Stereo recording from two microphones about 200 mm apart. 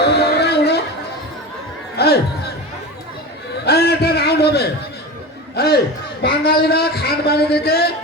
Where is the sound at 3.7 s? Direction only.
55° left (ahead or behind).